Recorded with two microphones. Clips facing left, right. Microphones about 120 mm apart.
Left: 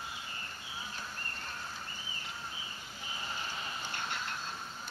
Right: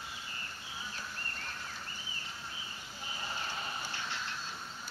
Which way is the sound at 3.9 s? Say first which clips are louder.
Left 2 dB; 50° left (ahead or behind).